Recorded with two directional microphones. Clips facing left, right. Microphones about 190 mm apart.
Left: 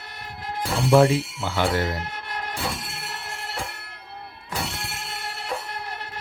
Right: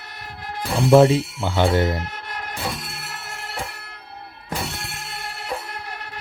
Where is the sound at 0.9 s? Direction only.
25° right (ahead or behind).